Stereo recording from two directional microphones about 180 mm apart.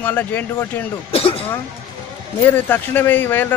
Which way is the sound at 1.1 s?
30° left (ahead or behind).